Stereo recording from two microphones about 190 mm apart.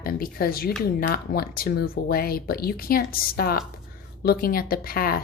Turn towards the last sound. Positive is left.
turn(degrees=50)  # may be behind; listen again after turning